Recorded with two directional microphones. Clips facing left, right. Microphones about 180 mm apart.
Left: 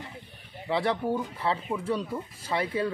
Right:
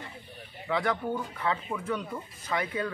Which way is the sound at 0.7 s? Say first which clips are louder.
Left 2 dB; 30° left (ahead or behind).